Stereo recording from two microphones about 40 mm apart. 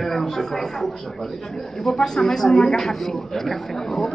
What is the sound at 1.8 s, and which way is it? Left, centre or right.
A man's voice, centre.